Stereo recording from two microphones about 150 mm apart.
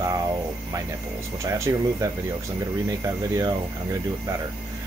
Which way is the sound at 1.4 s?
20° right (ahead or behind).